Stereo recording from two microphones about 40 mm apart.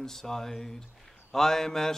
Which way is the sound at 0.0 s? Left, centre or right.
Centre.